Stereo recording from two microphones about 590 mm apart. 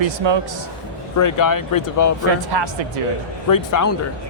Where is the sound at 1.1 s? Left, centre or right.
Left.